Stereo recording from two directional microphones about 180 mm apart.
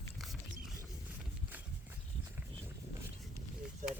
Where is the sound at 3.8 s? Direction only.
45° right (ahead or behind).